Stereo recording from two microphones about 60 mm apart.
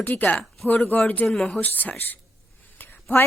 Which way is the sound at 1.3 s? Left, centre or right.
Centre.